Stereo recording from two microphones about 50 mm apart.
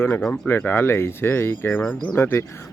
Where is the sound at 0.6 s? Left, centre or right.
Left.